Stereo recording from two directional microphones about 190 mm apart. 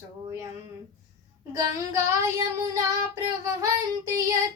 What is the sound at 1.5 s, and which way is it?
Female singing, 15° right (ahead or behind).